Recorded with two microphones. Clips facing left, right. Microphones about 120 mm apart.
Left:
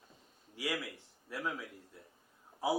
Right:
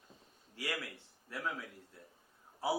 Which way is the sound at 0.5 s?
10° left (ahead or behind).